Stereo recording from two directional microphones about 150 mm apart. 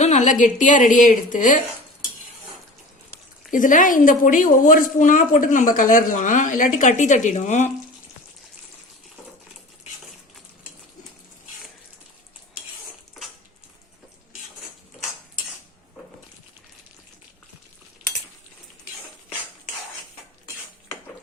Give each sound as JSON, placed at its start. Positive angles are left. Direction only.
{"t": 0.0, "sound": "a woman's voice", "side_deg": 50}
{"t": 3.5, "sound": "a woman's voice", "side_deg": 60}